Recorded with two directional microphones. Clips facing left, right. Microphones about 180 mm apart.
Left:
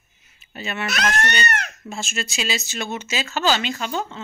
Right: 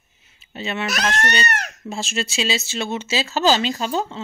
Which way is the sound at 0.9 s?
30° right (ahead or behind).